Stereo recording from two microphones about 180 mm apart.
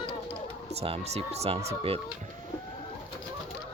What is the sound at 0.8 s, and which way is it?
Speech, 35° right (ahead or behind).